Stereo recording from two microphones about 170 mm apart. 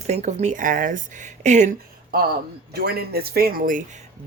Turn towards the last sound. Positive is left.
turn(degrees=-55)  # may be behind; listen again after turning